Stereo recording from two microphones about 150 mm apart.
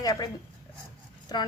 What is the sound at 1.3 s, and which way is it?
Speech, 25° left (ahead or behind).